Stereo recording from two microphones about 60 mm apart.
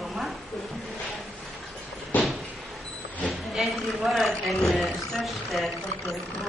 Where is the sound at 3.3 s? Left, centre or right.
Centre.